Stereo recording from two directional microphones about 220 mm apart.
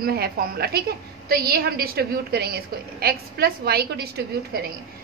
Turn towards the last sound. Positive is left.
turn(degrees=-45)  # may be behind; listen again after turning